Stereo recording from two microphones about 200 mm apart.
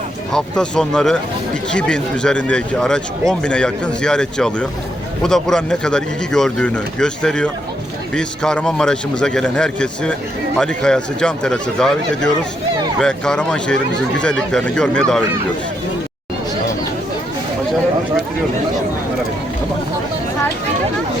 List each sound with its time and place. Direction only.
0.3 s speech: 5° left (ahead or behind)